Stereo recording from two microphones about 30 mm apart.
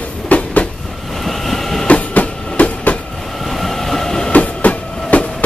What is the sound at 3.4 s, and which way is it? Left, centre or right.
Train, centre.